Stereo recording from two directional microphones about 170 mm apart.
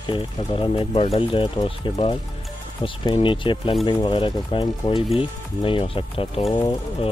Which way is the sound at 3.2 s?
30° left (ahead or behind).